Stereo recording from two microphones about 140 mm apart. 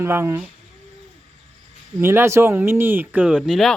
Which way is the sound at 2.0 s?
15° right (ahead or behind).